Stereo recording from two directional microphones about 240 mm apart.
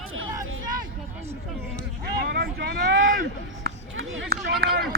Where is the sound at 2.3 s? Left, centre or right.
Right.